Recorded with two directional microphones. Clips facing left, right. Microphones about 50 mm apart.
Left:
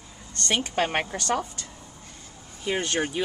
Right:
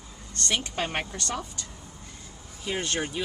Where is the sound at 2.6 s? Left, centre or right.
Left.